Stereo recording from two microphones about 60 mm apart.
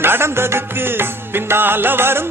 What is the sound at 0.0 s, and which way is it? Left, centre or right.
Music, right.